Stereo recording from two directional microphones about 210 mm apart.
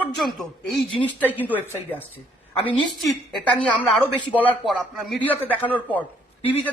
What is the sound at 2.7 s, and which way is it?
A woman's voice, centre (ahead or behind).